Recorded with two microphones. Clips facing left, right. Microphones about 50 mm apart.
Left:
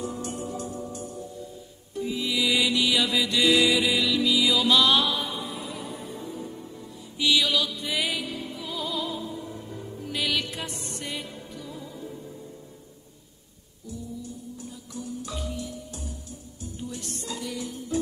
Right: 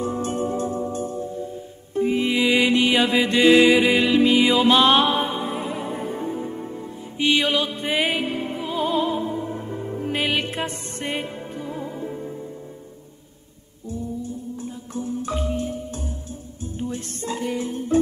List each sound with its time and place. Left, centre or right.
0.0 s music: right
13.8 s music: right